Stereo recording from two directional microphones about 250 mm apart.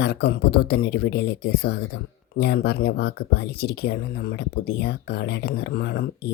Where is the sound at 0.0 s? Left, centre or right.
Left.